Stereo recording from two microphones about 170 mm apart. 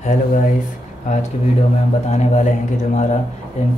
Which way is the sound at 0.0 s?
50° left (ahead or behind).